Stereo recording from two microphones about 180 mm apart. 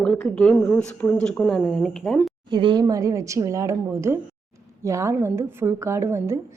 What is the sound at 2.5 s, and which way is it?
A woman's voice, 25° right (ahead or behind).